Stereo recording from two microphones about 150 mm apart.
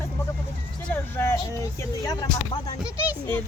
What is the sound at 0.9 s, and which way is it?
Speech, 15° left (ahead or behind).